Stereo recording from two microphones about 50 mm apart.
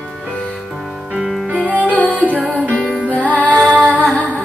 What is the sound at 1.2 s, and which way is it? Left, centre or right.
Music, centre.